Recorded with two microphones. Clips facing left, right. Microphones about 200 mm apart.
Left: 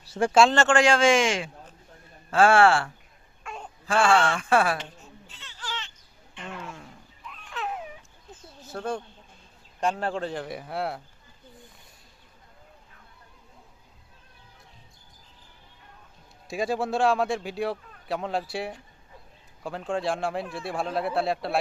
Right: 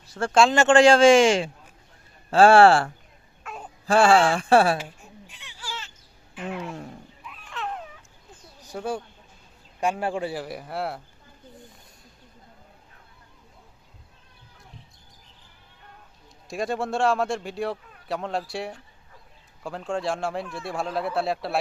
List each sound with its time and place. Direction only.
0.2 s speech: 5° left (ahead or behind)
0.7 s speech: 30° right (ahead or behind)
3.4 s a sound: 5° right (ahead or behind)
3.8 s speech: 35° right (ahead or behind)
4.8 s baby cry: 10° right (ahead or behind)
6.3 s speech: 5° right (ahead or behind)
6.6 s a sound: 40° right (ahead or behind)
7.3 s a sound: centre (ahead or behind)
8.6 s speech: 10° right (ahead or behind)
16.5 s speech: centre (ahead or behind)